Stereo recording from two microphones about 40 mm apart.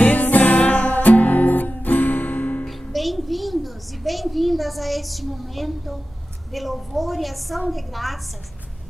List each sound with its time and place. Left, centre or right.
0.0 s music: left
2.9 s a sound: centre
6.5 s a woman's voice: centre